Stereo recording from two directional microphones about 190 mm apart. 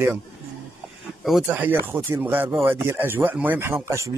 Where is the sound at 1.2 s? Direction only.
5° right (ahead or behind).